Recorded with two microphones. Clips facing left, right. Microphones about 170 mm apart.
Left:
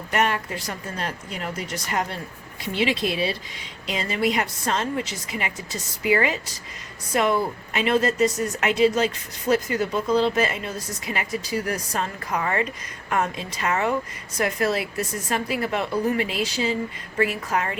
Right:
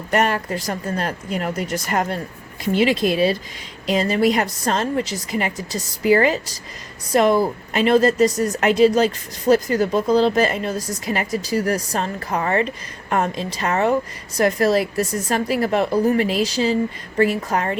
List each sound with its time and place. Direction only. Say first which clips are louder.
0.1 s speech: right 4 dB; 40° right (ahead or behind)